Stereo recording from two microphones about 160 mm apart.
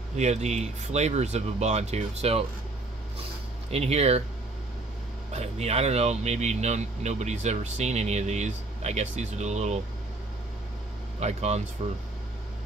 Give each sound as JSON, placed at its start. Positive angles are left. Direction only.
{"t": 0.1, "sound": "speech", "side_deg": -45}
{"t": 3.7, "sound": "speech", "side_deg": -40}
{"t": 5.3, "sound": "speech", "side_deg": -40}
{"t": 11.1, "sound": "speech", "side_deg": -45}